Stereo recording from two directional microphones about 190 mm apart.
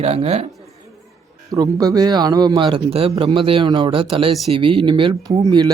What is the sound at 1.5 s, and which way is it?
Speech, 20° right (ahead or behind).